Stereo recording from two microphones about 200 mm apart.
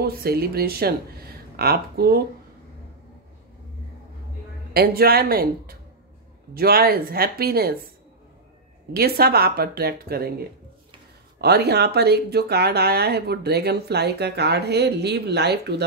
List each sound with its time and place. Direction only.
0.0 s speech: 50° right (ahead or behind)
4.7 s speech: 50° right (ahead or behind)
8.9 s speech: 50° right (ahead or behind)
11.4 s speech: 55° right (ahead or behind)